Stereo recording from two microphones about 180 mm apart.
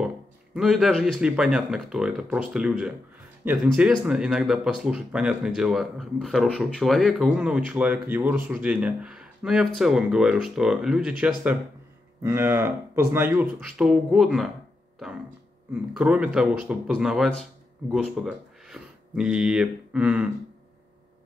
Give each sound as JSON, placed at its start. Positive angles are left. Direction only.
{"t": 0.6, "sound": "speech", "side_deg": 0}
{"t": 15.9, "sound": "speech", "side_deg": -5}